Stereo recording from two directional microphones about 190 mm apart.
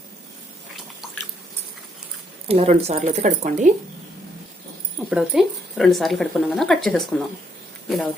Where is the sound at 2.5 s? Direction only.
35° right (ahead or behind).